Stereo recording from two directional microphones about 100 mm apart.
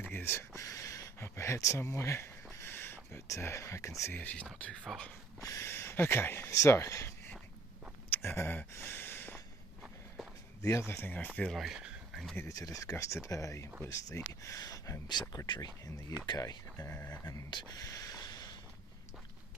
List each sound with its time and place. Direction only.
0.0 s speech: 20° left (ahead or behind)
5.4 s speech: 35° left (ahead or behind)
8.1 s gasp: 20° left (ahead or behind)
10.2 s a sound: centre (ahead or behind)
10.6 s speech: 25° left (ahead or behind)
11.5 s speech: 5° right (ahead or behind)
12.4 s speech: 35° left (ahead or behind)
15.0 s speech: 45° left (ahead or behind)
17.6 s a sound: 40° left (ahead or behind)